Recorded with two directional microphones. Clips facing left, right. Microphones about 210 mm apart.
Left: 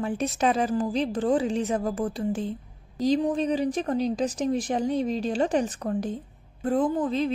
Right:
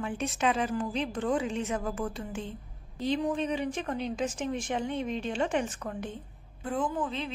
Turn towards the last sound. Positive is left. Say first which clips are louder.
# left 8 dB
turn(degrees=40)  # may be behind; listen again after turning